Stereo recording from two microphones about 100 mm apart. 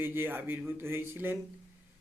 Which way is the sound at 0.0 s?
20° right (ahead or behind).